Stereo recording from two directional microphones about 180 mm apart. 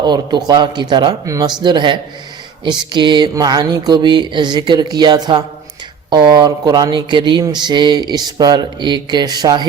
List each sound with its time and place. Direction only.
0.0 s speech: 25° right (ahead or behind)